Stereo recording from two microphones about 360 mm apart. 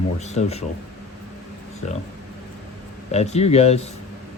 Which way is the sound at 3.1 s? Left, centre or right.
Centre.